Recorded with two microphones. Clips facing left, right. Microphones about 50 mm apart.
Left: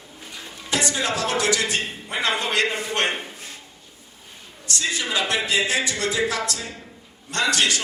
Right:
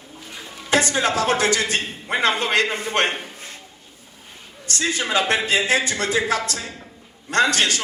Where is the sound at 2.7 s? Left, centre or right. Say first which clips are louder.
Right 2 dB; right.